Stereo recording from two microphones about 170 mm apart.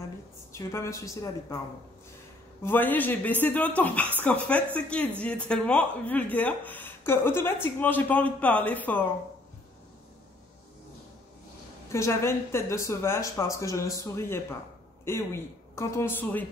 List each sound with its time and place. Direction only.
0.5 s speech: 15° left (ahead or behind)
2.6 s speech: 10° left (ahead or behind)
11.9 s speech: 15° left (ahead or behind)